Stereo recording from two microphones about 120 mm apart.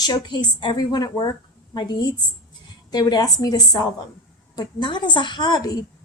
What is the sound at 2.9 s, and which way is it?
A woman's voice, 35° left (ahead or behind).